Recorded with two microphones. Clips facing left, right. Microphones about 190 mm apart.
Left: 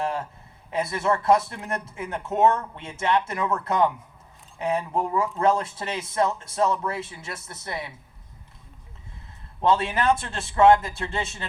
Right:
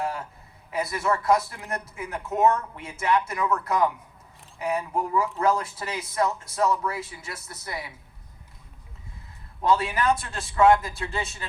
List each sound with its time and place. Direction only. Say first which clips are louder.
0.0 s a sound: left 2 dB; 25° left (ahead or behind)
0.7 s speech: left 2 dB; 25° left (ahead or behind)
9.6 s speech: left 1 dB; 25° left (ahead or behind)